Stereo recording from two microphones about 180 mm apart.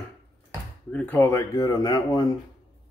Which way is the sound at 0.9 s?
10° left (ahead or behind).